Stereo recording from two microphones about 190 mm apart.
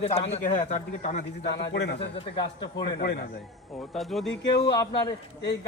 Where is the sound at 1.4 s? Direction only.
65° left (ahead or behind).